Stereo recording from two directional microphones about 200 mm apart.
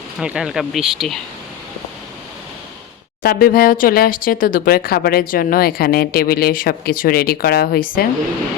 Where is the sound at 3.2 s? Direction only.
45° left (ahead or behind).